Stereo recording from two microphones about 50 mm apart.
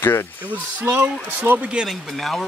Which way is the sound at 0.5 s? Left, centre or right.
Right.